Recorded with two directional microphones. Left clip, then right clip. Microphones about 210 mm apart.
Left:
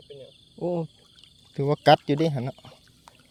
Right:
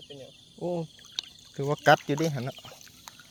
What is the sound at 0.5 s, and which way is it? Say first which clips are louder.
Speech: left 4 dB; 50° left (ahead or behind).